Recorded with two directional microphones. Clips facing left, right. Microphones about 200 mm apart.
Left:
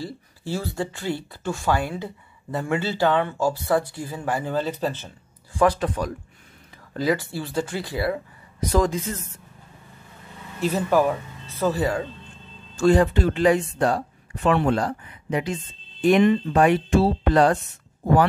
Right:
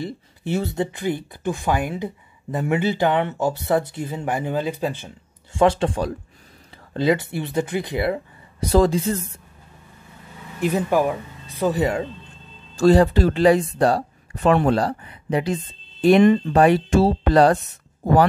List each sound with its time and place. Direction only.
0.0 s speech: 20° right (ahead or behind)
5.5 s speech: 25° right (ahead or behind)
10.6 s speech: 15° right (ahead or behind)
12.7 s speech: 35° right (ahead or behind)